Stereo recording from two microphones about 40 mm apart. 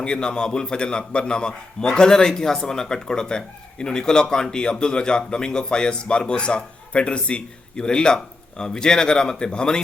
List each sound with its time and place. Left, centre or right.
0.0 s a man's voice: left